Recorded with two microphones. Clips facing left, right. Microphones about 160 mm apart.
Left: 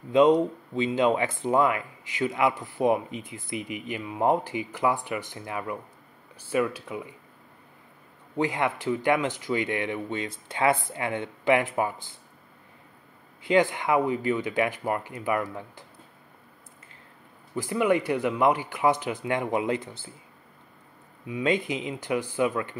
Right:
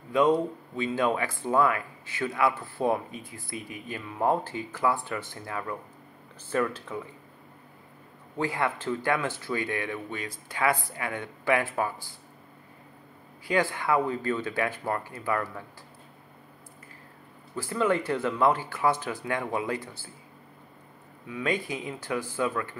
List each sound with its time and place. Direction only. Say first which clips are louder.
0.1 s speech: left 4 dB; 20° left (ahead or behind)
8.4 s speech: left 2 dB; 20° left (ahead or behind)
13.4 s speech: left 4 dB; 20° left (ahead or behind)
17.6 s speech: left 2 dB; 15° left (ahead or behind)
21.3 s speech: left 4 dB; 20° left (ahead or behind)